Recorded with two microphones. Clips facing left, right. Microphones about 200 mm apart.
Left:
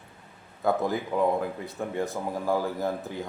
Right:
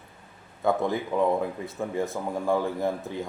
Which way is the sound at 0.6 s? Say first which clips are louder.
Right 1 dB; centre (ahead or behind).